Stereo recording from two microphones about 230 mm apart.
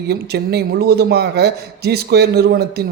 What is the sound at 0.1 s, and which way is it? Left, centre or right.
A man's voice, right.